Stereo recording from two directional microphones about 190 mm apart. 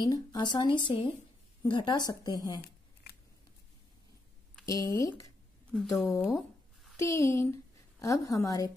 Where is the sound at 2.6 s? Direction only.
55° left (ahead or behind).